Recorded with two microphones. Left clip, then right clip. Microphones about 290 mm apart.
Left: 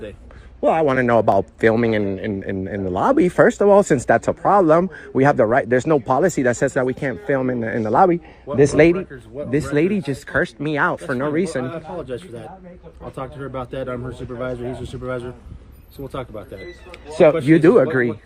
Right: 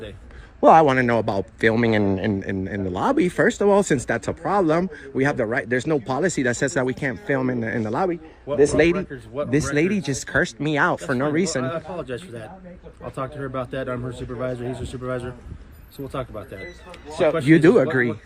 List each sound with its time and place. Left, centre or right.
0.6 s a man's voice: centre
8.9 s speech: right
9.5 s a man's voice: centre
17.1 s speech: centre
17.3 s a man's voice: centre